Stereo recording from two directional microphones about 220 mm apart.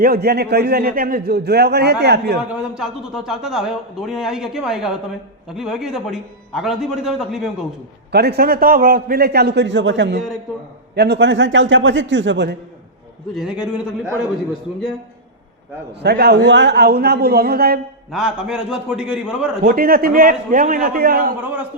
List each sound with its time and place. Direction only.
0.0 s a man's voice: 45° right (ahead or behind)
2.6 s a man's voice: 5° right (ahead or behind)
8.1 s a man's voice: 45° right (ahead or behind)
13.3 s a man's voice: 5° right (ahead or behind)
15.9 s a man's voice: 50° right (ahead or behind)
18.1 s a man's voice: 5° right (ahead or behind)
19.6 s a man's voice: 40° right (ahead or behind)
21.4 s a man's voice: 5° right (ahead or behind)